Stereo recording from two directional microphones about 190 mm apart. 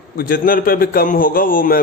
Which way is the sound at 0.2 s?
50° left (ahead or behind).